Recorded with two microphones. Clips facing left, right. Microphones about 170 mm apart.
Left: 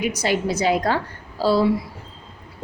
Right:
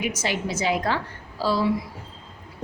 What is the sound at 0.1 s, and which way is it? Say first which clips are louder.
A woman's voice: left 5 dB; 35° left (ahead or behind).